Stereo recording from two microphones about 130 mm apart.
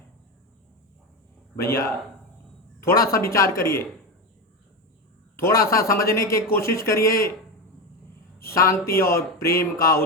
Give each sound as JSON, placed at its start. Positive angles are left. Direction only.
{"t": 1.5, "sound": "a man's voice", "side_deg": 25}
{"t": 5.4, "sound": "a man's voice", "side_deg": 25}
{"t": 8.4, "sound": "a man's voice", "side_deg": 25}